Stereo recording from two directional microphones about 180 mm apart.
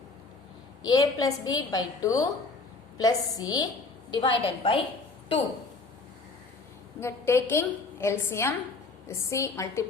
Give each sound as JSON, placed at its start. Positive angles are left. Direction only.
{"t": 0.9, "sound": "a woman's voice", "side_deg": 20}
{"t": 7.0, "sound": "a woman's voice", "side_deg": 15}